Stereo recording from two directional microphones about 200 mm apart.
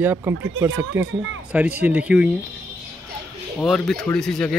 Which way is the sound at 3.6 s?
Centre (ahead or behind).